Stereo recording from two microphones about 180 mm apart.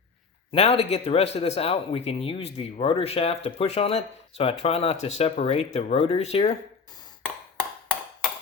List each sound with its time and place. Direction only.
0.5 s speech: 35° left (ahead or behind)